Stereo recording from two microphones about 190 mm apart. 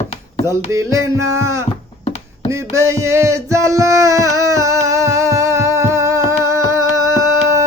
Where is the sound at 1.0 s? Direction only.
90° right.